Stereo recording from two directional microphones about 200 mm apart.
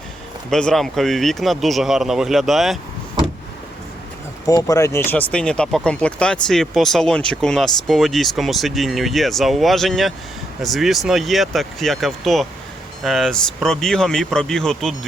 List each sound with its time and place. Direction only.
0.5 s speech: centre (ahead or behind)
4.4 s speech: 15° left (ahead or behind); by 14.9 s centre (ahead or behind)